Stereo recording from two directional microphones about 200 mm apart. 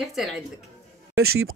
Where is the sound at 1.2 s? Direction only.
90° right.